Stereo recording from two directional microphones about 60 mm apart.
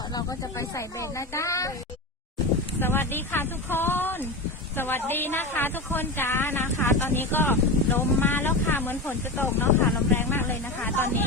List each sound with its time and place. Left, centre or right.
0.1 s speech: left
2.8 s a woman's voice: left